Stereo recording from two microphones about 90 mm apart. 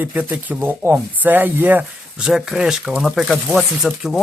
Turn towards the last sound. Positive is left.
turn(degrees=-5)  # may be behind; listen again after turning